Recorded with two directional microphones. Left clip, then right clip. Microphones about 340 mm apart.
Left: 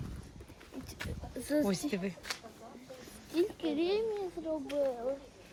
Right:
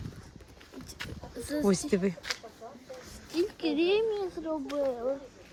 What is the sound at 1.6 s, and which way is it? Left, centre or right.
Speech, centre.